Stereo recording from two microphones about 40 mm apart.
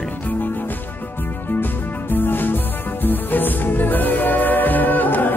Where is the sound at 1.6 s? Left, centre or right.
Left.